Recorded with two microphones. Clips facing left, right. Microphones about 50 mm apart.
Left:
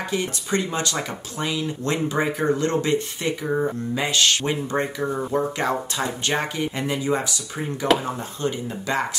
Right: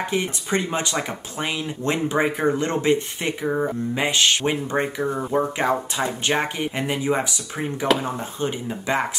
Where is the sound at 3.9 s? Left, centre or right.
Right.